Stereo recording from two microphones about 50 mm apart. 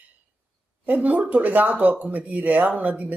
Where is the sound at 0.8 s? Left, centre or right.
Right.